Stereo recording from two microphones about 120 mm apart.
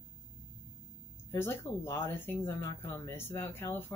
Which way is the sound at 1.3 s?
20° left (ahead or behind).